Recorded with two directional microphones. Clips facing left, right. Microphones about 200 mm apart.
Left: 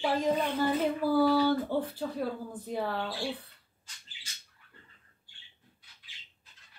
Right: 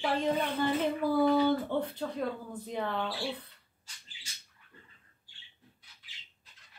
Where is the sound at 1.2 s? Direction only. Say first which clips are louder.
Right 2 dB; 20° right (ahead or behind).